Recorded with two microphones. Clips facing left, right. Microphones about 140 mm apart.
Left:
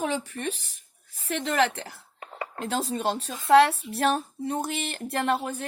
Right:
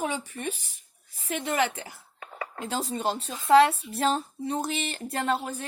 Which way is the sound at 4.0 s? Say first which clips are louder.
Left 1 dB; 55° left (ahead or behind).